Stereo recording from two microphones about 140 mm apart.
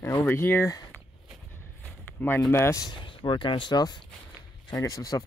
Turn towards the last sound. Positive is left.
turn(degrees=25)  # may be behind; listen again after turning